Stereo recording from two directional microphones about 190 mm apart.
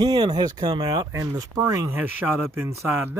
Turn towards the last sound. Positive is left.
turn(degrees=-10)  # may be behind; listen again after turning